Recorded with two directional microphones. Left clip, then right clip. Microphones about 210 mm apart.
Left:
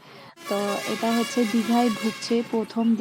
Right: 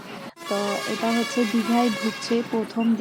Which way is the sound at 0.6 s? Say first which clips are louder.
Right 1 dB; centre (ahead or behind).